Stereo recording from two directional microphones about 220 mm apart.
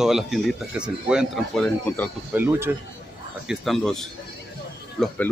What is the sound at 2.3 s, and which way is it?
Speech, 10° right (ahead or behind).